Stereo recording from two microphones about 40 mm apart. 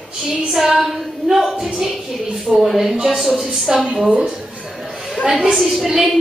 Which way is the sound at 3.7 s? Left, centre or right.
Right.